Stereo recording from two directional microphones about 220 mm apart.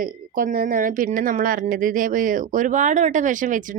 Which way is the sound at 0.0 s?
40° right (ahead or behind).